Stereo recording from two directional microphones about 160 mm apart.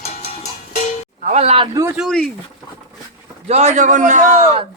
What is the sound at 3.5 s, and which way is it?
A man's voice, 45° right (ahead or behind).